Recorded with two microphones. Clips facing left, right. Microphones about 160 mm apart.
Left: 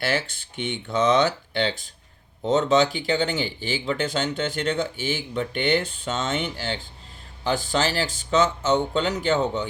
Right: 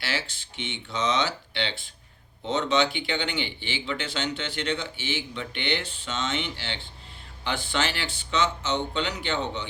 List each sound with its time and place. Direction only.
0.0 s speech: 50° left (ahead or behind)